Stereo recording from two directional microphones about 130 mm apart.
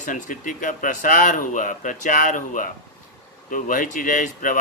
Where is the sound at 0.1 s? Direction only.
90° left.